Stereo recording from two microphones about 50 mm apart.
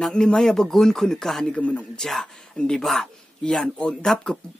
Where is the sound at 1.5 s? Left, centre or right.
Left.